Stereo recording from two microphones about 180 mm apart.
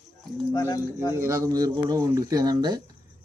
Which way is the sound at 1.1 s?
15° right (ahead or behind).